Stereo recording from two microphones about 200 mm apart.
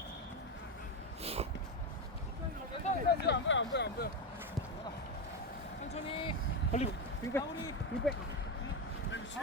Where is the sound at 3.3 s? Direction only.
65° left (ahead or behind).